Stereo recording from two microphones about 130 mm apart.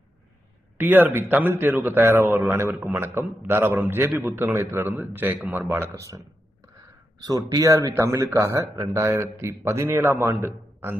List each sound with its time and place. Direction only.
0.7 s a man's voice: 15° right (ahead or behind)